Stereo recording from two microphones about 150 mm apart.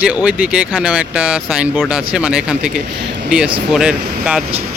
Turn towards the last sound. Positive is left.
turn(degrees=-5)  # may be behind; listen again after turning